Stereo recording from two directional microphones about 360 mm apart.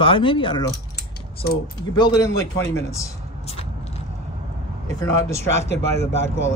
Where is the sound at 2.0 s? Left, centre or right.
Centre.